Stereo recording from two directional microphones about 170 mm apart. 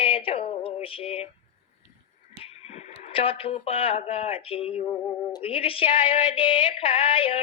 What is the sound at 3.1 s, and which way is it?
A woman's voice, 35° left (ahead or behind).